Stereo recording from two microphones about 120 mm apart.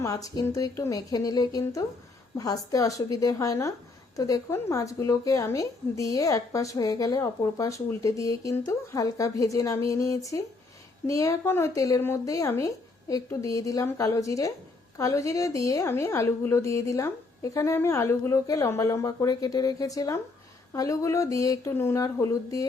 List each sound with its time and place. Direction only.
0.0 s a woman's voice: 30° left (ahead or behind)